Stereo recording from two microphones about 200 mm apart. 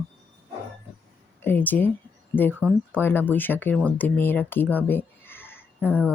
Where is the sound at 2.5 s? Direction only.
10° right (ahead or behind).